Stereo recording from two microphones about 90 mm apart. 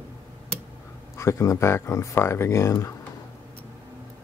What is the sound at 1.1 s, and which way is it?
Speech, 35° left (ahead or behind).